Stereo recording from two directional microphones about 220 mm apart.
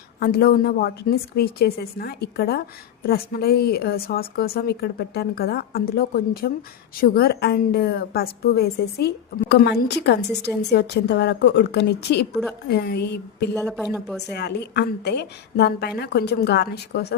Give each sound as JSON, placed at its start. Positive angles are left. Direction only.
{"t": 0.2, "sound": "a woman's voice", "side_deg": 45}
{"t": 13.5, "sound": "speech", "side_deg": 0}
{"t": 14.3, "sound": "a woman's voice", "side_deg": 50}